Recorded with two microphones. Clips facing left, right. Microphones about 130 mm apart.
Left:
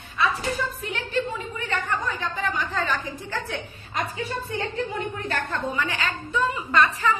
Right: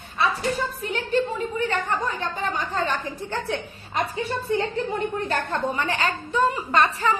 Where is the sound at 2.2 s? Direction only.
35° right (ahead or behind).